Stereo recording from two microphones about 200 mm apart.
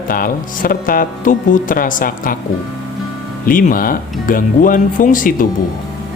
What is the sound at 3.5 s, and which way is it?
Speech, 45° left (ahead or behind).